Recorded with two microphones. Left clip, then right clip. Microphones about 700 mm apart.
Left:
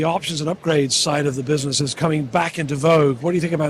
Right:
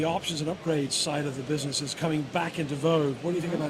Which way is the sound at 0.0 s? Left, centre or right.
Left.